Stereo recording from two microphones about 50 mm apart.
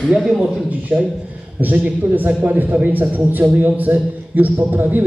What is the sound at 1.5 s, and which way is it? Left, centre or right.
A man's voice, right.